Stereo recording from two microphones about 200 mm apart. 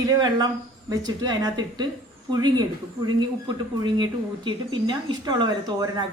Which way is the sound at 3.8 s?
25° right (ahead or behind).